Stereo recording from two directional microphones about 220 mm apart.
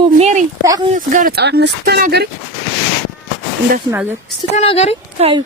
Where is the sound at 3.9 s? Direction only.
10° right (ahead or behind).